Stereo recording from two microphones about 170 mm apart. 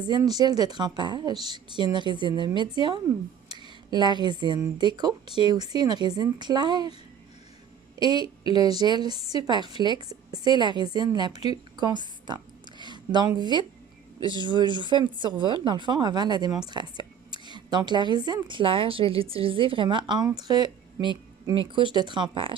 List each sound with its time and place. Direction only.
0.0 s a woman's voice: 25° right (ahead or behind)
7.9 s a woman's voice: 25° right (ahead or behind)